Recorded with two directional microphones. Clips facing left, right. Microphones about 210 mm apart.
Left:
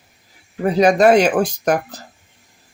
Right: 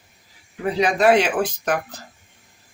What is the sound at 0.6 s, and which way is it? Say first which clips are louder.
Speech: left 5 dB; 45° left (ahead or behind).